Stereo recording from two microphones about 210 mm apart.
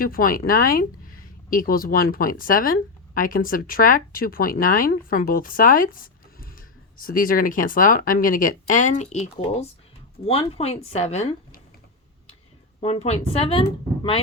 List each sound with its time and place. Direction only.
0.0 s speech: 45° left (ahead or behind)
12.8 s speech: 30° left (ahead or behind)